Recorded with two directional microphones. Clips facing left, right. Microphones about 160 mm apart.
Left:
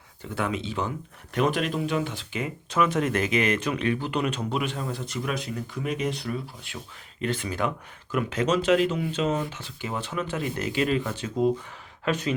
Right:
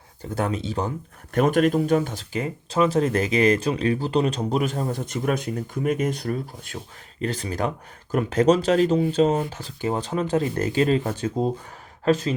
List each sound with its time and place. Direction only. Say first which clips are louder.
0.2 s speech: right 3 dB; 40° right (ahead or behind)